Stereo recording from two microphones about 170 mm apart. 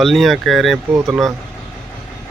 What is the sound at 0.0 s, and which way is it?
Speech, centre (ahead or behind).